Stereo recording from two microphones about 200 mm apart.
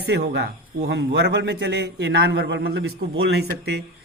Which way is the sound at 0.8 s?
60° right (ahead or behind).